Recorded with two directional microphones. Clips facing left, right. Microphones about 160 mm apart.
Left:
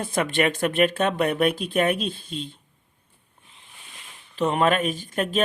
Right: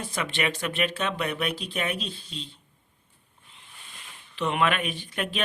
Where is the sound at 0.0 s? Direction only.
50° left (ahead or behind).